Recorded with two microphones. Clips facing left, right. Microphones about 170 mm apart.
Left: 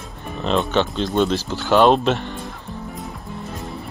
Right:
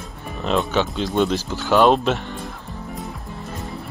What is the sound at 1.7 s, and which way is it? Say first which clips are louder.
Speech: left 1 dB; centre (ahead or behind).